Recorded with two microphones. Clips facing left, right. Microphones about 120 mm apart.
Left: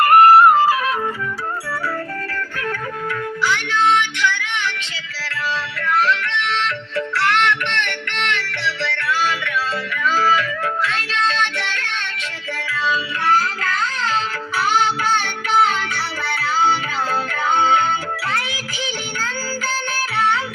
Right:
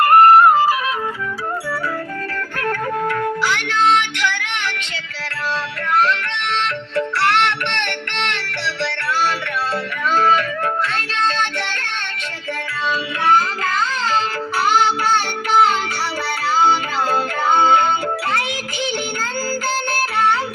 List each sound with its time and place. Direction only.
6.9 s music: 60° right (ahead or behind)